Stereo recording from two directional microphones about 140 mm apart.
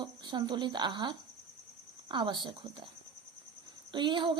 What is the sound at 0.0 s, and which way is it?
A woman's voice, 30° right (ahead or behind).